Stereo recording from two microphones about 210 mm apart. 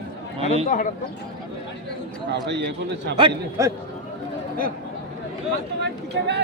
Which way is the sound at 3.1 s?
20° right (ahead or behind).